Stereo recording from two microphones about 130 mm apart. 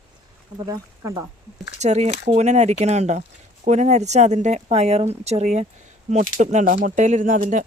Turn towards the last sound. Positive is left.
turn(degrees=-85)